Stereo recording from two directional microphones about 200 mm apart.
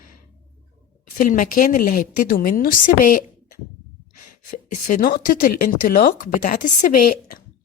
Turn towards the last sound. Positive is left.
turn(degrees=40)  # may be behind; listen again after turning